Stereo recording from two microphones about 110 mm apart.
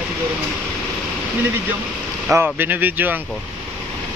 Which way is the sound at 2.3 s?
20° right (ahead or behind).